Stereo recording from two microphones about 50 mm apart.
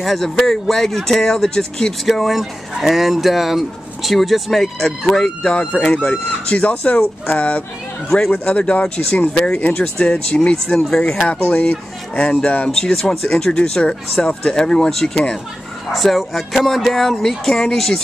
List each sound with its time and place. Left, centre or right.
0.0 s speech: centre
2.0 s speech: centre
6.2 s speech: left
10.8 s speech: centre
11.1 s speech: left; by 18.0 s centre